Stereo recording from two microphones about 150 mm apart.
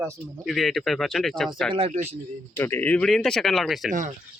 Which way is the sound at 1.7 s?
40° right (ahead or behind).